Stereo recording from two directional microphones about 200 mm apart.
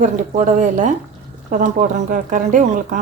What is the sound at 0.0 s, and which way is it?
Speech, 40° right (ahead or behind).